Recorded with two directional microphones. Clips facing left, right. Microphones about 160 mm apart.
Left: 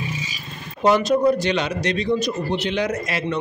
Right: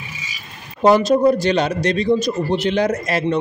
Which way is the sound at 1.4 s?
40° right (ahead or behind).